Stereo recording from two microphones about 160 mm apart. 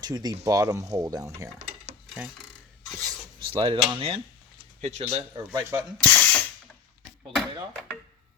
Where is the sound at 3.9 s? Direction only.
35° right (ahead or behind).